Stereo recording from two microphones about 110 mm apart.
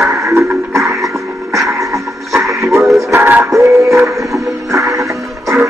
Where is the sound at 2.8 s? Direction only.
Centre (ahead or behind).